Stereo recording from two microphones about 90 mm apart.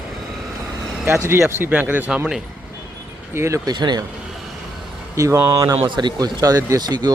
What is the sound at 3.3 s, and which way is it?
Speech, 30° right (ahead or behind).